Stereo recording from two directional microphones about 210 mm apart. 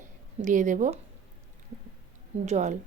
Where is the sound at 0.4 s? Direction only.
35° right (ahead or behind).